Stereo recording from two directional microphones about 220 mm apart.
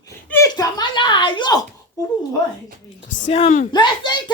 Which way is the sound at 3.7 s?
20° left (ahead or behind).